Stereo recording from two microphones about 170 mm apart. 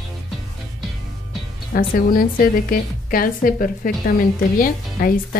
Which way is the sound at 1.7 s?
55° left (ahead or behind).